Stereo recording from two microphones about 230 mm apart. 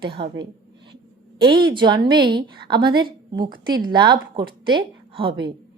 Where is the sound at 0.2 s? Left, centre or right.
Right.